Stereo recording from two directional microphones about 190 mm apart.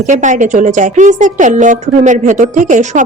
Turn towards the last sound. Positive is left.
turn(degrees=-40)  # may be behind; listen again after turning